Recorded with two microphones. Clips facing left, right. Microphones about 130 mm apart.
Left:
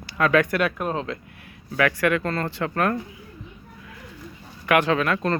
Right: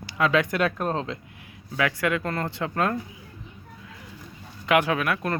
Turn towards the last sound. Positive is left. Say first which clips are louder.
# left 3 dB
turn(degrees=-10)  # may be behind; listen again after turning